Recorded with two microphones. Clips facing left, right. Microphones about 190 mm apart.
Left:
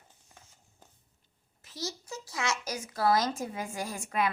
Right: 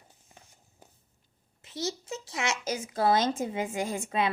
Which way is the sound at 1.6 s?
25° right (ahead or behind).